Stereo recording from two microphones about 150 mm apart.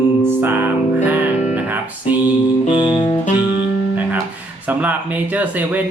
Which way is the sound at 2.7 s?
30° left (ahead or behind).